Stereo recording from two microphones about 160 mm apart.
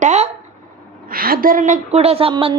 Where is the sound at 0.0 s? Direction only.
45° right (ahead or behind).